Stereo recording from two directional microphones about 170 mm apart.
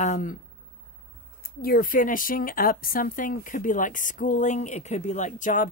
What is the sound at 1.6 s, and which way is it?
Speech, 55° left (ahead or behind).